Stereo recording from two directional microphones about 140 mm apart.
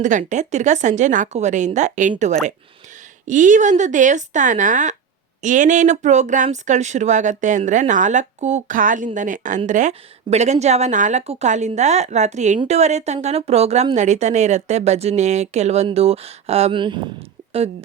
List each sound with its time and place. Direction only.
0.0 s speech: 65° right (ahead or behind); by 17.0 s 35° right (ahead or behind)